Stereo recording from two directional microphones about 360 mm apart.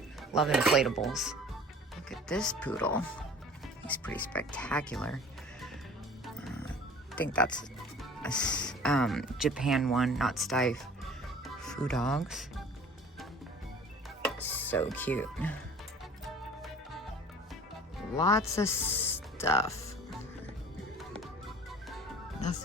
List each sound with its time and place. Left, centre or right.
0.2 s speech: centre
6.2 s music: centre
8.2 s speech: centre
14.3 s speech: centre
18.2 s speech: centre